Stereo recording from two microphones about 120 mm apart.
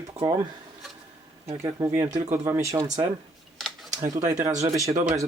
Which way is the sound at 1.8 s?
15° right (ahead or behind).